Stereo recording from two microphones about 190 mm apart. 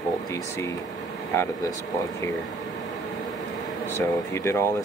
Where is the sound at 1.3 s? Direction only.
15° left (ahead or behind).